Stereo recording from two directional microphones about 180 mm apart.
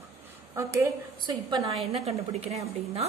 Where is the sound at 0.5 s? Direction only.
20° right (ahead or behind).